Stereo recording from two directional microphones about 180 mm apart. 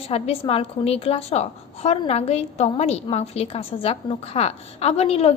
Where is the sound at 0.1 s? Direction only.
35° left (ahead or behind).